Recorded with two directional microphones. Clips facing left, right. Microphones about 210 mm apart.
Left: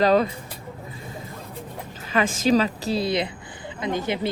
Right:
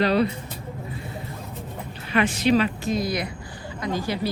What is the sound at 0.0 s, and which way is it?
Speech, 45° left (ahead or behind).